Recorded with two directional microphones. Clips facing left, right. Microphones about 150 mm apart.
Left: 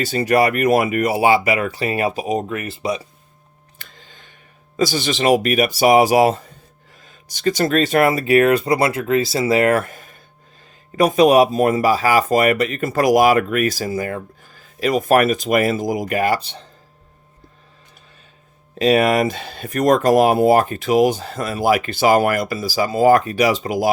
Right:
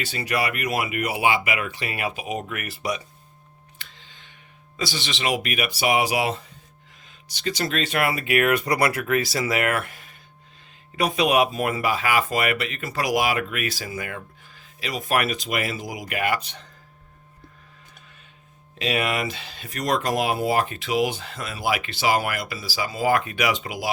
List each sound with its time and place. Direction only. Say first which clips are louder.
0.0 s speech: left 10 dB; 45° left (ahead or behind); by 3.1 s 30° left (ahead or behind)
3.8 s a sound: left 5 dB; 45° left (ahead or behind)
4.8 s speech: left 9 dB; 45° left (ahead or behind)
18.7 s speech: left 10 dB; 40° left (ahead or behind)